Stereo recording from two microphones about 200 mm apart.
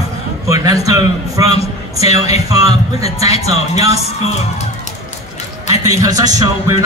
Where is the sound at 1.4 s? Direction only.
30° left (ahead or behind).